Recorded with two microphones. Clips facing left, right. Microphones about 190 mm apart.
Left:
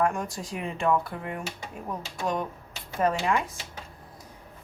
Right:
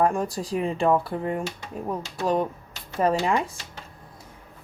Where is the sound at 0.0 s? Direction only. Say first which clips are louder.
Right 4 dB; 35° right (ahead or behind).